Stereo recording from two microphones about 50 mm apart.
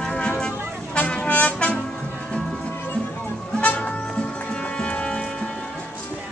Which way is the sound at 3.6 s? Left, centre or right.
Left.